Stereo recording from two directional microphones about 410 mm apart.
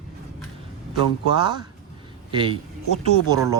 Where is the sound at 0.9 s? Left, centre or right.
Left.